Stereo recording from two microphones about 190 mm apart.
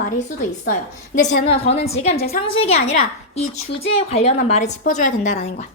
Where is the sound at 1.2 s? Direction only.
35° left (ahead or behind).